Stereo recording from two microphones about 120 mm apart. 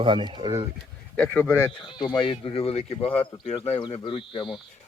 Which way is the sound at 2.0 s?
40° left (ahead or behind).